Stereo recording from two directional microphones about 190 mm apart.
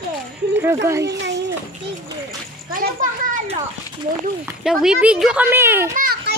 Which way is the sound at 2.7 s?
45° right (ahead or behind).